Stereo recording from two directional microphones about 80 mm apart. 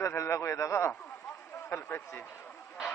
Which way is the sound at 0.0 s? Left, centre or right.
Left.